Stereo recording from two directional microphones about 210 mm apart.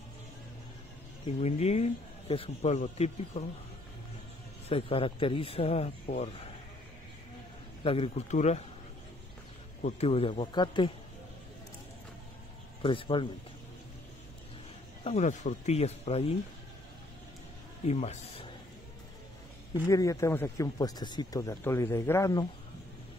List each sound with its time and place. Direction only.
1.2 s speech: 30° left (ahead or behind)
4.6 s speech: 25° left (ahead or behind)
7.8 s speech: 25° left (ahead or behind)
9.8 s speech: 30° left (ahead or behind)
12.8 s speech: 25° left (ahead or behind)
15.0 s speech: 35° left (ahead or behind)
17.8 s speech: 30° left (ahead or behind)
19.9 s speech: 15° left (ahead or behind)